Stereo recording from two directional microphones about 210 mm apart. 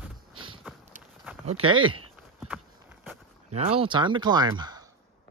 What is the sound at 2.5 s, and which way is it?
Walk, 10° right (ahead or behind).